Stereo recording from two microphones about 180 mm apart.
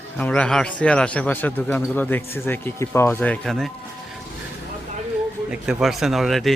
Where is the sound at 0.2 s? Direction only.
5° left (ahead or behind).